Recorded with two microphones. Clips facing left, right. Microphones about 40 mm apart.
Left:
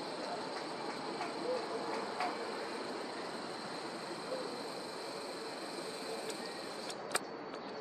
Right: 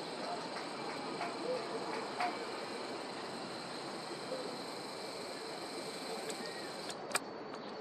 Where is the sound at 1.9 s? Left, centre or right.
Centre.